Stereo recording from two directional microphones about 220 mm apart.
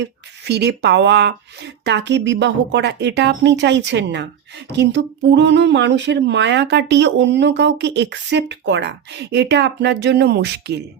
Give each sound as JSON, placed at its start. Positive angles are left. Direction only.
{"t": 0.0, "sound": "speech", "side_deg": -50}